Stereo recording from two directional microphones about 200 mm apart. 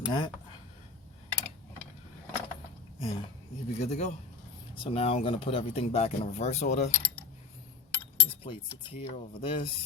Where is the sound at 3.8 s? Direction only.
35° left (ahead or behind).